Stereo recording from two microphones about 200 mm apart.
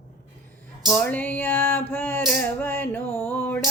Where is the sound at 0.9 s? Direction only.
10° left (ahead or behind).